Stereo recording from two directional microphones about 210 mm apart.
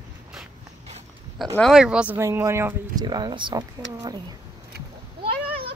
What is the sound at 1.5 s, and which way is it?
A child's voice, centre (ahead or behind).